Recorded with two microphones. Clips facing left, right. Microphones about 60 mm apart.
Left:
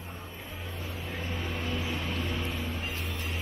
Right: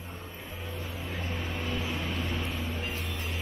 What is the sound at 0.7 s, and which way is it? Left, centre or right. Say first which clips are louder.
Vehicle: right 1 dB; centre.